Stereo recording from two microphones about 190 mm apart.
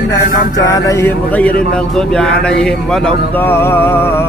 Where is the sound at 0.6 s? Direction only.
15° left (ahead or behind).